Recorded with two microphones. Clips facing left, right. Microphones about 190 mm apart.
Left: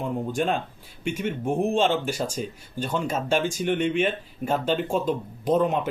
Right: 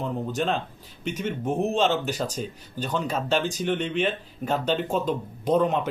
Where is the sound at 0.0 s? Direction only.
10° left (ahead or behind).